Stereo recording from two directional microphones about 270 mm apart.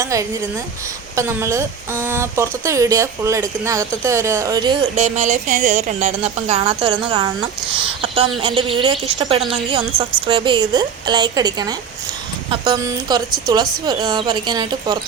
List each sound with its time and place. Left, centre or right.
0.0 s a woman's voice: centre